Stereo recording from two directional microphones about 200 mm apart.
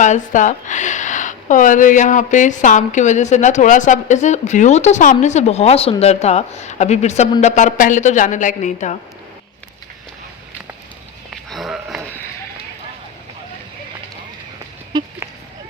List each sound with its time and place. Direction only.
0.0 s speech: 40° left (ahead or behind)
11.4 s sniff: centre (ahead or behind)